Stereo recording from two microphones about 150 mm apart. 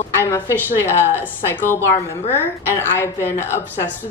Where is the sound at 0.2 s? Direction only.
15° left (ahead or behind).